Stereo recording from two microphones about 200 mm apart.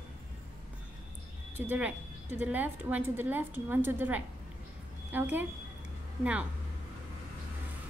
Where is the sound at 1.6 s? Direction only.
5° right (ahead or behind).